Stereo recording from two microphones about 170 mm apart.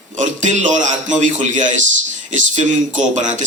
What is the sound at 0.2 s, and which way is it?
A man's voice, 45° right (ahead or behind).